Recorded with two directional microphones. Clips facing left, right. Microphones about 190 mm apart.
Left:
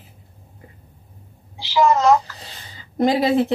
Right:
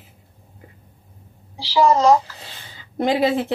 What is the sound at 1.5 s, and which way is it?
Speech, 35° right (ahead or behind).